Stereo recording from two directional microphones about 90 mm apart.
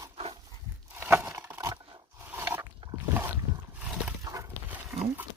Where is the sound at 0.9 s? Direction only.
25° right (ahead or behind).